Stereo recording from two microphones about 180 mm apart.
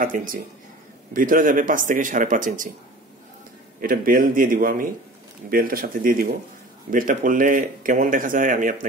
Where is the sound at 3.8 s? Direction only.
50° right (ahead or behind).